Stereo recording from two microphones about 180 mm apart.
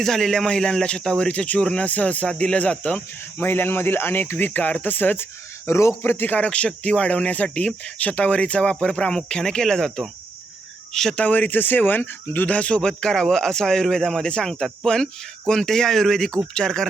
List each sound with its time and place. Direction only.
0.0 s speech: centre (ahead or behind)